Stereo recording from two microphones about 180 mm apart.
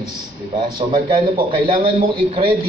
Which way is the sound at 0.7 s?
30° right (ahead or behind).